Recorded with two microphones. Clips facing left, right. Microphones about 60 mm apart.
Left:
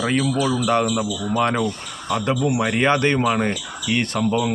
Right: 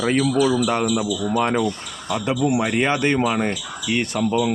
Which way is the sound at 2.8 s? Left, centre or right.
Centre.